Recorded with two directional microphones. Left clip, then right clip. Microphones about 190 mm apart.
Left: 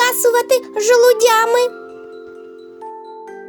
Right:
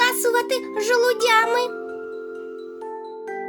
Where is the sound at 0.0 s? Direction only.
30° left (ahead or behind).